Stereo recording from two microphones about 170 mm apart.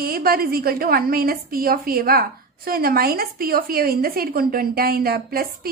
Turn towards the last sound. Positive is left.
turn(degrees=-60)  # may be behind; listen again after turning